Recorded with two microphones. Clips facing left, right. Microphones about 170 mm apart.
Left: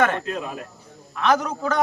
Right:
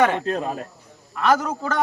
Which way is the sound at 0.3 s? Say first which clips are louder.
Right 4 dB; 35° right (ahead or behind).